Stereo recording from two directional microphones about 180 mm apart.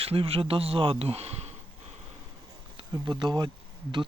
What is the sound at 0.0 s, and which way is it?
Speech, 30° right (ahead or behind).